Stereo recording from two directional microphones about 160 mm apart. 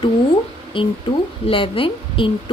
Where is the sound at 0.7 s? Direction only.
30° left (ahead or behind).